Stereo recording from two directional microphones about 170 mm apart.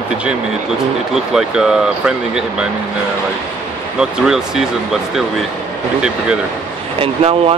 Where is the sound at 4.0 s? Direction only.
5° right (ahead or behind).